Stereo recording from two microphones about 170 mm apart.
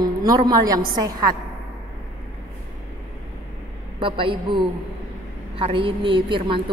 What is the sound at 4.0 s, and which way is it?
A man's voice, 30° right (ahead or behind).